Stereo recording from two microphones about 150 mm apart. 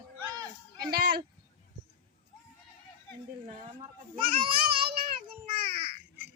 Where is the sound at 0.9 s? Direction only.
85° right.